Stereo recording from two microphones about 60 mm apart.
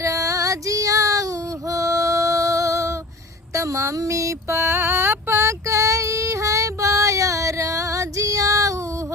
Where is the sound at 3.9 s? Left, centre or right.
Right.